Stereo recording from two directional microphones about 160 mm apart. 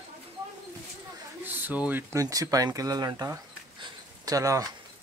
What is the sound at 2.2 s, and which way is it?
Speech, 20° right (ahead or behind).